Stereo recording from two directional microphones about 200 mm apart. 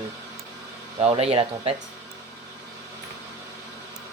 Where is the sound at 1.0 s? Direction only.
30° right (ahead or behind).